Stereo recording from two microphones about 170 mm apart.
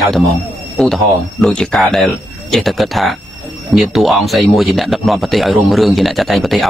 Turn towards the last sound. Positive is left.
turn(degrees=0)  # may be behind; listen again after turning